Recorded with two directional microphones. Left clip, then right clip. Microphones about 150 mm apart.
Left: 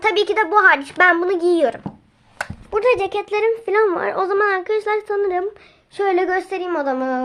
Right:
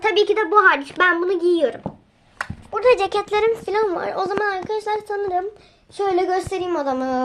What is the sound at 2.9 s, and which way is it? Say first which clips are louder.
A child's voice: right 1 dB; 15° left (ahead or behind).